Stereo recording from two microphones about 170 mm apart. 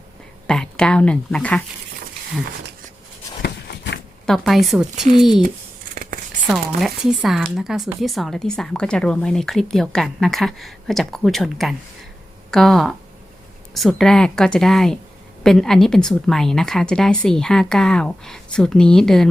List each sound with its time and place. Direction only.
0.4 s a woman's voice: 5° left (ahead or behind)
3.4 s walk: 75° left (ahead or behind)
4.3 s a woman's voice: centre (ahead or behind)
5.9 s a sound: 60° right (ahead or behind)
6.5 s a woman's voice: centre (ahead or behind)